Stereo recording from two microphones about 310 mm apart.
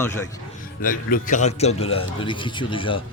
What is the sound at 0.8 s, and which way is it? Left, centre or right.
A man's voice, left.